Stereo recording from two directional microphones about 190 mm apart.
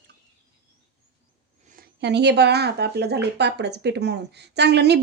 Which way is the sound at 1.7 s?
55° right (ahead or behind).